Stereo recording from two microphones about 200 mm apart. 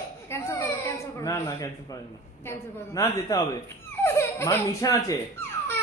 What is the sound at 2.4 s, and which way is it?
Speech, 15° left (ahead or behind).